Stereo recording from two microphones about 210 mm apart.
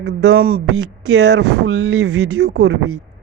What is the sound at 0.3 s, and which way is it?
Speech, 90° right.